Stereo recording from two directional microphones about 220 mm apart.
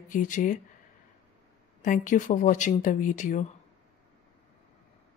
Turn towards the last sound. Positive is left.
turn(degrees=35)  # may be behind; listen again after turning